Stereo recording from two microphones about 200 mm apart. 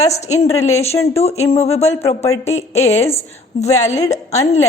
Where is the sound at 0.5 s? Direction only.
15° left (ahead or behind).